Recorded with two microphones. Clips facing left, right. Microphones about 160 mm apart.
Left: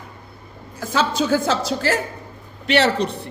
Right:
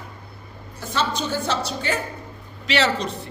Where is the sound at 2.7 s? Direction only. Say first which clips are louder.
Left 4 dB; 60° left (ahead or behind).